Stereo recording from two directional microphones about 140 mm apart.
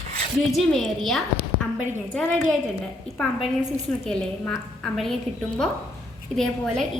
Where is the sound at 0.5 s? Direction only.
5° left (ahead or behind).